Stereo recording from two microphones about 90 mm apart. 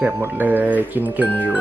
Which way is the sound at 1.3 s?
20° left (ahead or behind).